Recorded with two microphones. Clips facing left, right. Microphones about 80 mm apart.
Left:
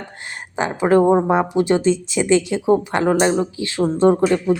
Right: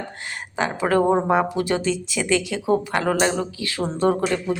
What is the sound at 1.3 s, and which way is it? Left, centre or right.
Speech, left.